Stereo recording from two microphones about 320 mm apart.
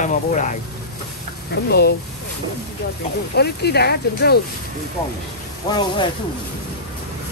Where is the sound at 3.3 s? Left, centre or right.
Left.